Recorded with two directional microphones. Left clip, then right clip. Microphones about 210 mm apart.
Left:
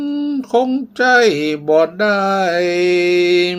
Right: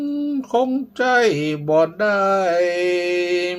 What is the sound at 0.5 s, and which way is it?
Mantra, 20° left (ahead or behind).